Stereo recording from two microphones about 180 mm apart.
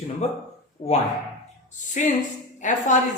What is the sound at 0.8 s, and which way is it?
Speech, 35° left (ahead or behind).